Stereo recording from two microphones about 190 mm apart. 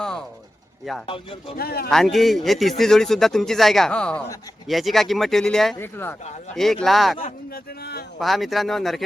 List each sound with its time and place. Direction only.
0.0 s a sound: 5° left (ahead or behind)
1.0 s speech: 30° left (ahead or behind)
1.5 s speech: 55° left (ahead or behind)
1.9 s speech: centre (ahead or behind)
7.2 s speech: 50° left (ahead or behind)
8.2 s speech: centre (ahead or behind)